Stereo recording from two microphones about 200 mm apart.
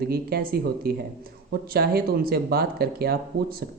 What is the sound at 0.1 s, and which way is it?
Speech, 50° right (ahead or behind).